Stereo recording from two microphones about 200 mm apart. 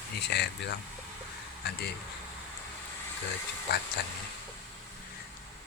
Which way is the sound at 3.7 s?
55° left (ahead or behind).